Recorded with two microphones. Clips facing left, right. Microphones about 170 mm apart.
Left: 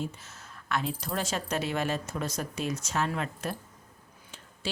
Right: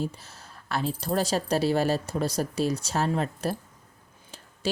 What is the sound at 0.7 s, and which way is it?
Speech, 35° right (ahead or behind).